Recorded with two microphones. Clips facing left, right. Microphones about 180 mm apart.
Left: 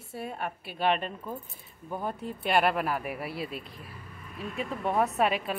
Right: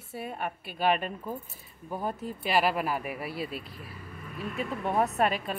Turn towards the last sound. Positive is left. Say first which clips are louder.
# even
turn(degrees=0)  # may be behind; listen again after turning